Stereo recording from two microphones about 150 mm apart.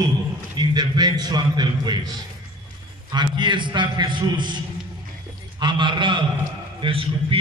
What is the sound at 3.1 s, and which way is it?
A man's voice, 30° right (ahead or behind).